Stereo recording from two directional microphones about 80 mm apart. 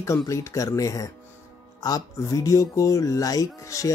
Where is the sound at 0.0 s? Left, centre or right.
Left.